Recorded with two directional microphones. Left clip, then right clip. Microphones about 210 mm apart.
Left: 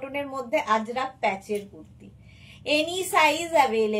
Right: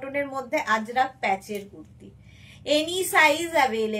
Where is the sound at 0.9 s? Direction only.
15° right (ahead or behind).